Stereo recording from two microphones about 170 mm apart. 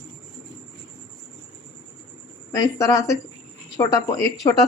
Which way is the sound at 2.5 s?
20° left (ahead or behind).